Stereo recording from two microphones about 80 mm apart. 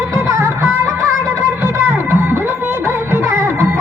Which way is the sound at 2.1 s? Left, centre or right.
Right.